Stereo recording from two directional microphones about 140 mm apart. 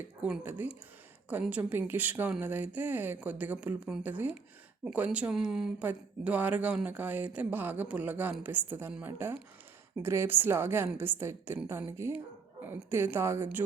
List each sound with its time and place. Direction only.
0.2 s speech: 10° right (ahead or behind)